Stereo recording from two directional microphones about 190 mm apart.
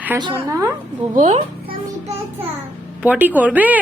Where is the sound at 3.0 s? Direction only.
10° right (ahead or behind).